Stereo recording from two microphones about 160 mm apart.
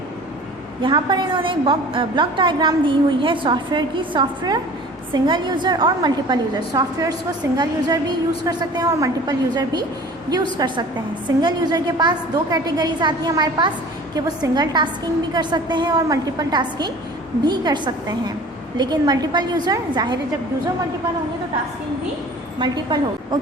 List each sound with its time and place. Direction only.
0.8 s a woman's voice: 30° right (ahead or behind)
22.5 s a woman's voice: 30° right (ahead or behind)